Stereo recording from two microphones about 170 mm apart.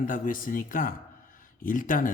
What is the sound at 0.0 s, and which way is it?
Speech, 55° left (ahead or behind).